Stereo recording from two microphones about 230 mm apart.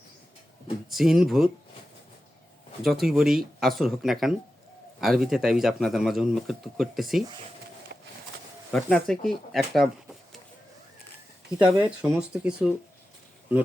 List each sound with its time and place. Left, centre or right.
0.9 s speech: centre
2.8 s speech: centre
7.9 s a sound: right
8.7 s speech: centre
11.6 s speech: centre